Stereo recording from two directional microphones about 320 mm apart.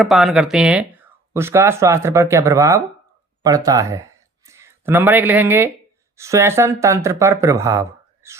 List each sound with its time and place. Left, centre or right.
0.0 s speech: centre